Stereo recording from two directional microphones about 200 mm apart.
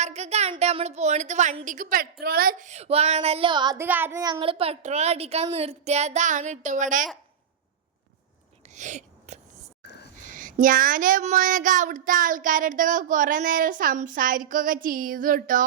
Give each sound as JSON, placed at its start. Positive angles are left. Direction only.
{"t": 0.0, "sound": "a woman's voice", "side_deg": -35}
{"t": 3.8, "sound": "a woman's voice", "side_deg": -10}
{"t": 8.7, "sound": "a sound", "side_deg": -40}
{"t": 10.2, "sound": "speech", "side_deg": -40}